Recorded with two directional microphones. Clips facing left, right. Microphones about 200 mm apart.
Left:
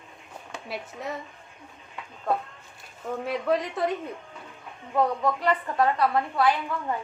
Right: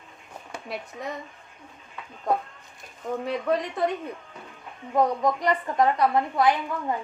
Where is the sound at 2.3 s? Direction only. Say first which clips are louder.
Right 2 dB; 15° right (ahead or behind).